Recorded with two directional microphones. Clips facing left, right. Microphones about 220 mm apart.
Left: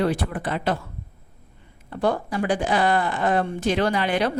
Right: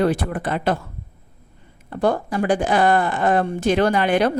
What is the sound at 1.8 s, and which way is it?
A woman's voice, 50° right (ahead or behind).